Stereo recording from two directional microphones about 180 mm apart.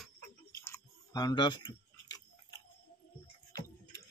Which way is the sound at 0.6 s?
20° left (ahead or behind).